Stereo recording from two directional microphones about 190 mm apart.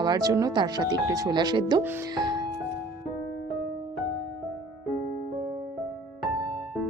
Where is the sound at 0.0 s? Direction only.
20° right (ahead or behind).